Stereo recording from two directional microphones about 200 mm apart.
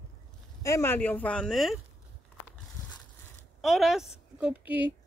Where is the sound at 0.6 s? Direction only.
15° left (ahead or behind).